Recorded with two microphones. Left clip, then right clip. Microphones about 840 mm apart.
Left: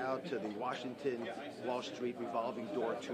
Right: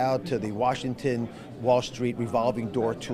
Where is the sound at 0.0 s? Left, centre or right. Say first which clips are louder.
Right 12 dB; right.